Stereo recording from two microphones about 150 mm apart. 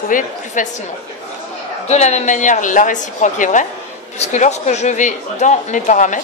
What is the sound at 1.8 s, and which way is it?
A woman's voice, 50° left (ahead or behind).